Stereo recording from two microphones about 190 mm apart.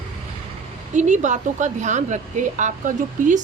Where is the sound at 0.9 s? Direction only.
40° right (ahead or behind).